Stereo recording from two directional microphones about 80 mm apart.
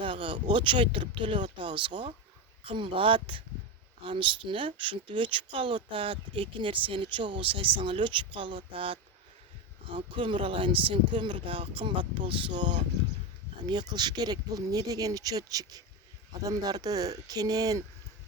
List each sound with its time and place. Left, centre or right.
0.0 s speech: right
9.9 s speech: right
13.7 s speech: right